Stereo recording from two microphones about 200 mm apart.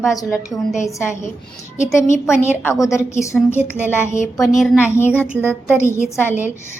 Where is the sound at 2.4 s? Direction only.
10° left (ahead or behind).